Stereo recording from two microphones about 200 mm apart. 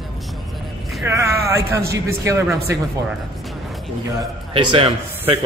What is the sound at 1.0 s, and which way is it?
A man's voice, 15° right (ahead or behind).